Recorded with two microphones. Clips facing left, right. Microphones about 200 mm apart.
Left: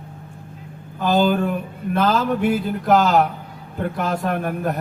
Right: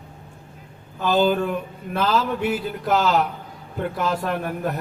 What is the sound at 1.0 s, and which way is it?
Speech, 50° left (ahead or behind).